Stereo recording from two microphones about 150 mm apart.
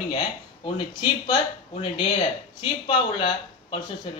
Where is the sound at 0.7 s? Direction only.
30° left (ahead or behind).